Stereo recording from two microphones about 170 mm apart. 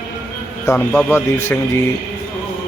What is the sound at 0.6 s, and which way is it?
Speech, 10° left (ahead or behind).